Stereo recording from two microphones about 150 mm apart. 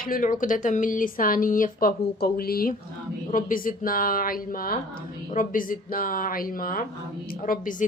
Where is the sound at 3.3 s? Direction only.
65° left (ahead or behind).